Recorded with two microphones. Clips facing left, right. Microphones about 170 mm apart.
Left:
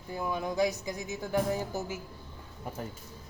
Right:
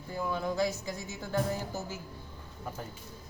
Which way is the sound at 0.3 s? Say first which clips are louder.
Left 2 dB; 15° left (ahead or behind).